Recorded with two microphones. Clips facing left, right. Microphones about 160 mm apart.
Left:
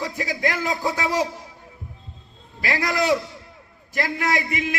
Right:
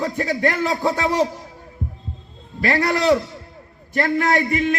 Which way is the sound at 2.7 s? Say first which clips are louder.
Right 4 dB; 35° right (ahead or behind).